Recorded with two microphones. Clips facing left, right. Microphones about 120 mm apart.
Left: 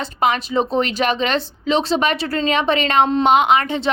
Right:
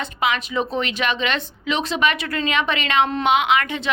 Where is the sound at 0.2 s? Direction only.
40° left (ahead or behind).